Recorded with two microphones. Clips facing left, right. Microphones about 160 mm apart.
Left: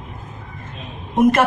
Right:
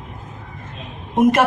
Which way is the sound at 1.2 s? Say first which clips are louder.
Even; 15° right (ahead or behind).